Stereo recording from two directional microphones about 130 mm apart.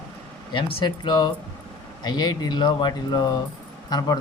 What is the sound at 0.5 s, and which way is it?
Speech, 35° left (ahead or behind).